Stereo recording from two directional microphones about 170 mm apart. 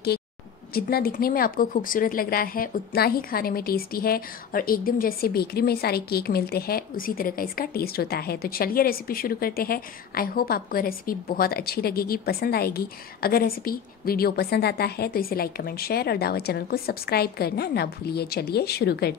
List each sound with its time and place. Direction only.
0.7 s speech: 65° left (ahead or behind)